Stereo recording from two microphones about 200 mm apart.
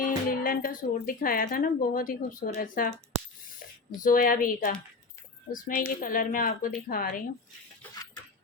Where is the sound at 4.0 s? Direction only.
45° left (ahead or behind).